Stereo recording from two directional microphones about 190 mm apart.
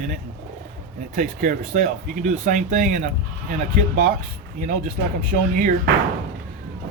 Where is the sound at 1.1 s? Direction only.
45° right (ahead or behind).